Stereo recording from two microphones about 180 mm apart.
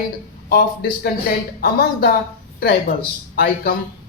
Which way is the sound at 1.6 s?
55° left (ahead or behind).